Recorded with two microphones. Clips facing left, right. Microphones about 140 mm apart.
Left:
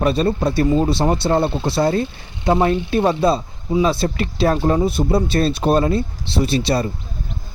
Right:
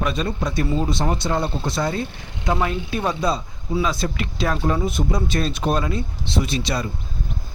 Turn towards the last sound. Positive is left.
turn(degrees=35)  # may be behind; listen again after turning